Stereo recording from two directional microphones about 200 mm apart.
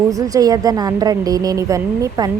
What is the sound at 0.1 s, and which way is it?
A woman's voice, 15° right (ahead or behind).